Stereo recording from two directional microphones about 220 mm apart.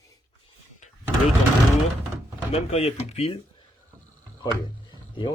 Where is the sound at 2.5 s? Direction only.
30° left (ahead or behind).